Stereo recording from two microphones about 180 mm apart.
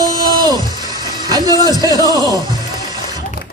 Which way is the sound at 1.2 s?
20° right (ahead or behind).